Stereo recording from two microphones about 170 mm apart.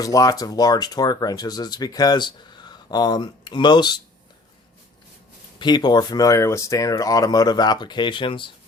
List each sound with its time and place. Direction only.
0.0 s speech: 20° left (ahead or behind)
5.5 s speech: 25° left (ahead or behind)